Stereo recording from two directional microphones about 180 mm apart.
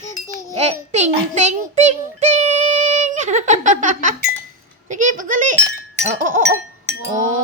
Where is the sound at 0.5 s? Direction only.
40° right (ahead or behind).